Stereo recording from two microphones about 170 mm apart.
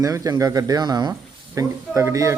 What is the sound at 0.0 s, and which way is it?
Speech, 20° right (ahead or behind).